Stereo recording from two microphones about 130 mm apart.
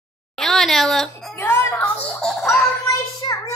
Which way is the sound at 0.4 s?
Centre (ahead or behind).